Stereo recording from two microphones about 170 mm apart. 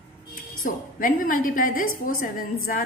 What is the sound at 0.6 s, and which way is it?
A woman's voice, 55° left (ahead or behind).